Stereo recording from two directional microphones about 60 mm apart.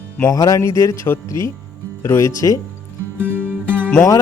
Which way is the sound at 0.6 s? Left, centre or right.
Left.